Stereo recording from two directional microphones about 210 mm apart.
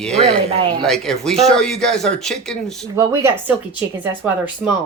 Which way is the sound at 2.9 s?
15° right (ahead or behind).